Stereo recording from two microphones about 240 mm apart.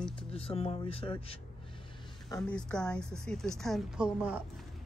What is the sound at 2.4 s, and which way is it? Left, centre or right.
A woman's voice, centre.